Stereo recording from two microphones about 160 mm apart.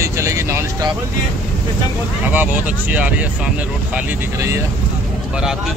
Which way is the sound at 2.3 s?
10° right (ahead or behind).